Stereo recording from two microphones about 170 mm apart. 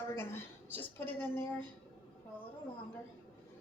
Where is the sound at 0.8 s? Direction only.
10° left (ahead or behind).